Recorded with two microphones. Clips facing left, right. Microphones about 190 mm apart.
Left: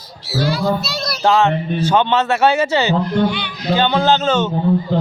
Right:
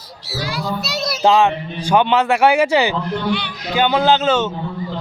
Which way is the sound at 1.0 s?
15° right (ahead or behind).